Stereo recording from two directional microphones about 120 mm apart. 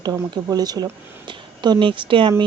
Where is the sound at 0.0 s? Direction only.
30° right (ahead or behind).